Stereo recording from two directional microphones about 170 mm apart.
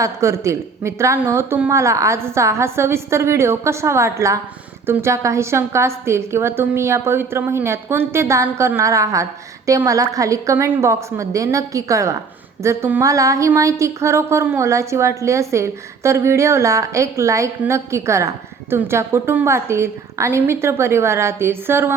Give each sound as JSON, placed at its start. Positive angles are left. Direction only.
{"t": 0.0, "sound": "a woman's voice", "side_deg": -15}